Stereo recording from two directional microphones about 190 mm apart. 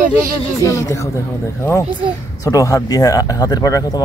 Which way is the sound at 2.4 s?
15° left (ahead or behind).